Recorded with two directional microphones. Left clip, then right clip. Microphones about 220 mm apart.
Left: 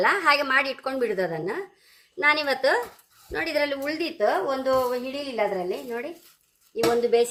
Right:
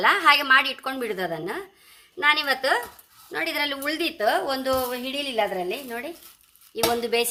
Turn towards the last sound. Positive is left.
turn(degrees=-30)  # may be behind; listen again after turning